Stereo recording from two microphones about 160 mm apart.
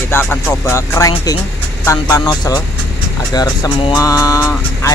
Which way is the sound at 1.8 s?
20° left (ahead or behind).